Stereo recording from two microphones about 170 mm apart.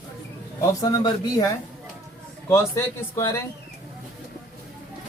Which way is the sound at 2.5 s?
20° left (ahead or behind).